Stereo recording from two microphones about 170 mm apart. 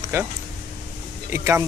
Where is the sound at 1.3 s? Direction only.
15° right (ahead or behind).